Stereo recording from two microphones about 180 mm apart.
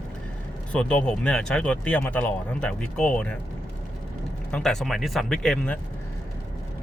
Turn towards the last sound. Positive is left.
turn(degrees=5)  # may be behind; listen again after turning